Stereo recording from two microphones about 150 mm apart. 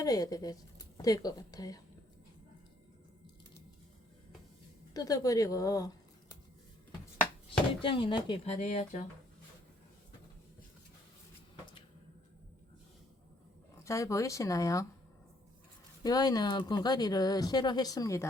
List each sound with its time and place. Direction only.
0.0 s speech: 25° left (ahead or behind)
4.9 s speech: 25° left (ahead or behind)
7.8 s speech: 35° left (ahead or behind)
8.5 s speech: 50° left (ahead or behind)
13.8 s speech: 20° left (ahead or behind)
16.0 s speech: 25° left (ahead or behind)